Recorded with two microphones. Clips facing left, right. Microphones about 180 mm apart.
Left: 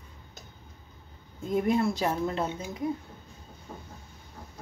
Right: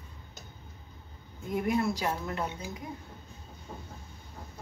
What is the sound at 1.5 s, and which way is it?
Speech, 25° left (ahead or behind).